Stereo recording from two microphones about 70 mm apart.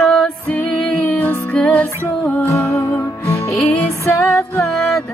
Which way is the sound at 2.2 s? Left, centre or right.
Left.